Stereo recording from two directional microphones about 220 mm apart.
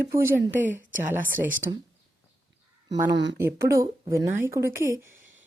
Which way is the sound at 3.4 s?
10° right (ahead or behind).